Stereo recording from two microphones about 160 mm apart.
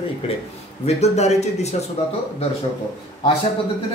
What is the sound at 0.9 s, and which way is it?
Speech, 40° left (ahead or behind).